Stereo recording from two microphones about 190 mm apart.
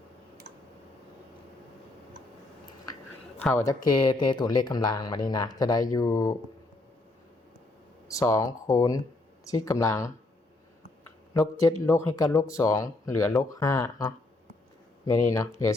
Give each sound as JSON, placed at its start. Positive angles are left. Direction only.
{"t": 3.4, "sound": "speech", "side_deg": 15}
{"t": 8.0, "sound": "speech", "side_deg": 15}
{"t": 11.3, "sound": "speech", "side_deg": 15}